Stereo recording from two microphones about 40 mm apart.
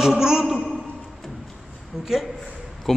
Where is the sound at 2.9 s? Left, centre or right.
Centre.